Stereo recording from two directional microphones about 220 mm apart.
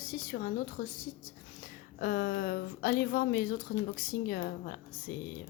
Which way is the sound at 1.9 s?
40° left (ahead or behind).